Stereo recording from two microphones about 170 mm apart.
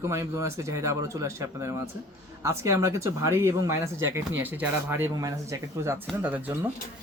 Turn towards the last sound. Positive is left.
turn(degrees=-10)  # may be behind; listen again after turning